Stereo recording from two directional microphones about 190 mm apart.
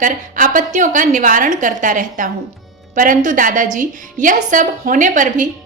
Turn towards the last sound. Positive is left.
turn(degrees=-40)  # may be behind; listen again after turning